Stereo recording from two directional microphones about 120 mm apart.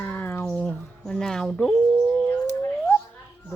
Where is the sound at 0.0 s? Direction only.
15° left (ahead or behind); by 2.0 s centre (ahead or behind).